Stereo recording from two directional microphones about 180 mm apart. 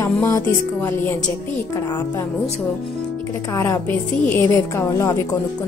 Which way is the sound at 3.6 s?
10° left (ahead or behind).